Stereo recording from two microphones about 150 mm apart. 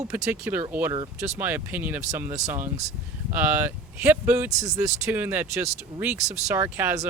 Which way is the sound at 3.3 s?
10° right (ahead or behind).